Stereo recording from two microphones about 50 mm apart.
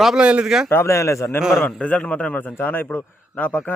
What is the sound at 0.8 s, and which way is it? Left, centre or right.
Speech, left.